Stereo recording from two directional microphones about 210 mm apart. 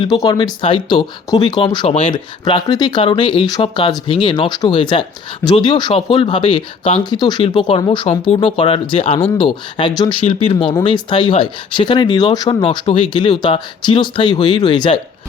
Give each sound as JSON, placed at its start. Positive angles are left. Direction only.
{"t": 0.0, "sound": "speech", "side_deg": 20}